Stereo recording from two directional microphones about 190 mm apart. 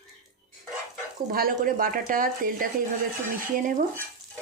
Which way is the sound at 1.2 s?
50° right (ahead or behind).